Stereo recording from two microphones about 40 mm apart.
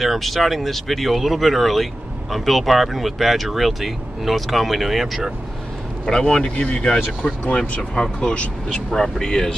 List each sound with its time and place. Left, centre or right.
0.0 s speech: centre
6.0 s speech: centre
7.4 s speech: left
7.9 s speech: left